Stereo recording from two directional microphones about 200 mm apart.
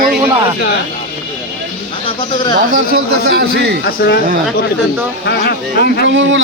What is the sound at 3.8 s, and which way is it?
Speech, 55° left (ahead or behind).